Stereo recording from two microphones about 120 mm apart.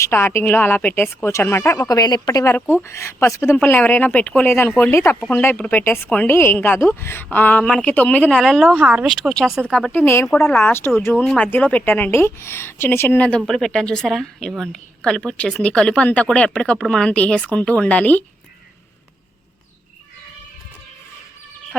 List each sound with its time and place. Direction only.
0.0 s a woman's voice: 20° left (ahead or behind)
2.0 s a woman's voice: 35° left (ahead or behind)
2.4 s a woman's voice: 20° left (ahead or behind)
8.4 s a woman's voice: centre (ahead or behind); by 10.2 s 15° left (ahead or behind)
10.2 s a woman's voice: centre (ahead or behind)
10.5 s a woman's voice: 15° left (ahead or behind)